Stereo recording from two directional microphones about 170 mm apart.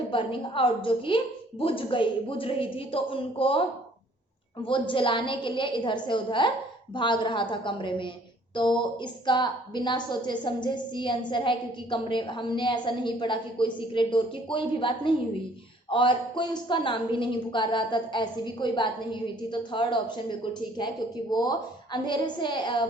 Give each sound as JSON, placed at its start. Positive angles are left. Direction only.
{"t": 0.1, "sound": "a woman's voice", "side_deg": 30}